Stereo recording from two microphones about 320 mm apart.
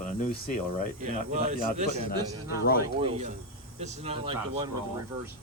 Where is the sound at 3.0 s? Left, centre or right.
Centre.